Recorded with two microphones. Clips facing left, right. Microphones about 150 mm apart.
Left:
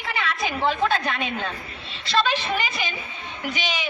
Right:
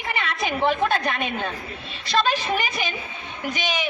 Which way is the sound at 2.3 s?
45° right (ahead or behind).